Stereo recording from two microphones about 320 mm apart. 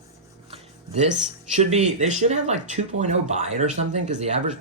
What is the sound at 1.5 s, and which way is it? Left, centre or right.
Speech, right.